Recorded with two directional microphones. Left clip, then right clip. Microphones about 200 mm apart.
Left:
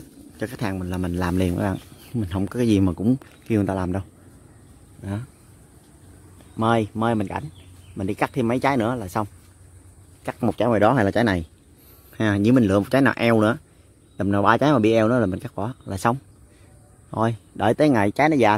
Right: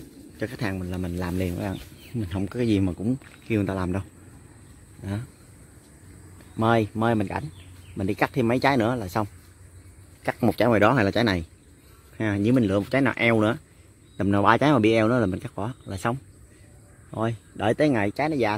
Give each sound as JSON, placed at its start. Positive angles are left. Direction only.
{"t": 0.4, "sound": "speech", "side_deg": 10}
{"t": 3.5, "sound": "a man's voice", "side_deg": 10}
{"t": 6.5, "sound": "a man's voice", "side_deg": 5}